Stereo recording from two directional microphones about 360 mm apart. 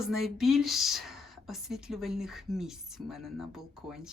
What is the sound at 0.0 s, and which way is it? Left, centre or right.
Speech, centre.